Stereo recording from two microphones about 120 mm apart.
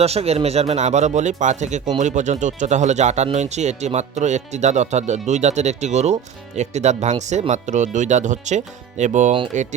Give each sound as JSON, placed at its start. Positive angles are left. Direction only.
{"t": 0.0, "sound": "speech", "side_deg": -60}
{"t": 2.0, "sound": "speech", "side_deg": -90}